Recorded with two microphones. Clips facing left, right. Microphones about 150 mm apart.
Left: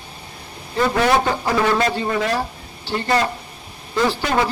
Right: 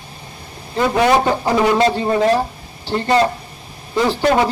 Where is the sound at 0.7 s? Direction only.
25° right (ahead or behind).